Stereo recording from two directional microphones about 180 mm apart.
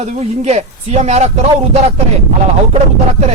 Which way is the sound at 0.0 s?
35° right (ahead or behind).